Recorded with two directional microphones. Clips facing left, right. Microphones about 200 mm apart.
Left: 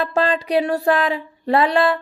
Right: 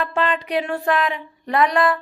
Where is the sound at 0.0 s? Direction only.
35° left (ahead or behind).